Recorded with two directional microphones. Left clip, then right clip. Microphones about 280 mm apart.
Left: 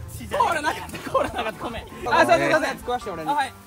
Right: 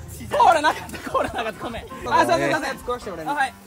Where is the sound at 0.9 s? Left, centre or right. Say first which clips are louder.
Even; centre.